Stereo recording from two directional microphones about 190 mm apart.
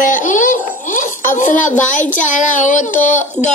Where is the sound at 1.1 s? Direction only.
15° left (ahead or behind).